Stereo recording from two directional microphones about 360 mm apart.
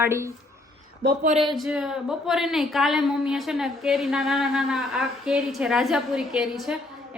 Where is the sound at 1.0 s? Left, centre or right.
Right.